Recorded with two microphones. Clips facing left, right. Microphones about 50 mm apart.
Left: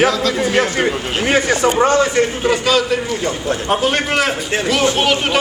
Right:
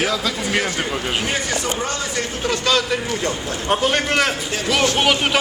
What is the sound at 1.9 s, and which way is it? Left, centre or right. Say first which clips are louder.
Speech: left 11 dB; left.